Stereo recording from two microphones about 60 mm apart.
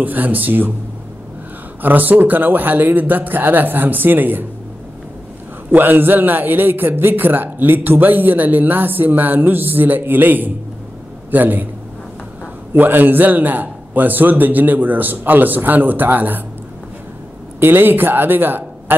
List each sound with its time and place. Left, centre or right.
0.0 s speech: right
1.8 s a man's voice: right
5.7 s a man's voice: right
12.7 s a man's voice: right
17.6 s speech: right